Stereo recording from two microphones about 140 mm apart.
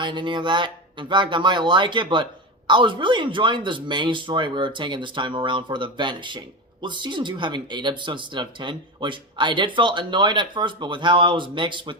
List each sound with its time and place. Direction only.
0.0 s speech: 35° right (ahead or behind)